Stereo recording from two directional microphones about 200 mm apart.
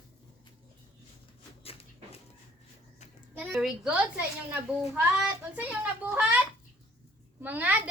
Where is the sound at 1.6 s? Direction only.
30° left (ahead or behind).